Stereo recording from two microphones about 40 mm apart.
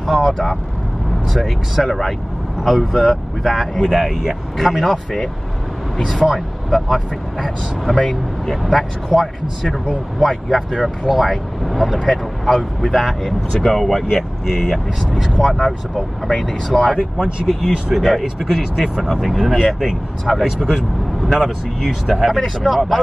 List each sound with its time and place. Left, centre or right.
0.2 s speech: centre
6.2 s speech: centre
16.9 s speech: centre
17.5 s speech: centre
20.4 s speech: centre